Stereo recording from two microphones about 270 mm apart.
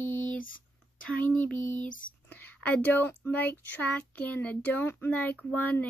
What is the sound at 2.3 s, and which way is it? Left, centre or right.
Speech, centre.